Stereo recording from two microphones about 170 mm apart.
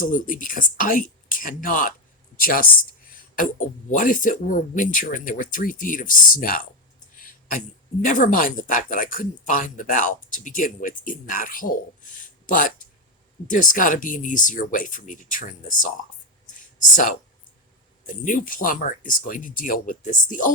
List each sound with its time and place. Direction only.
0.0 s speech: 50° left (ahead or behind)
8.0 s speech: 50° left (ahead or behind)
16.6 s a sound: 50° left (ahead or behind)
18.0 s speech: 50° left (ahead or behind)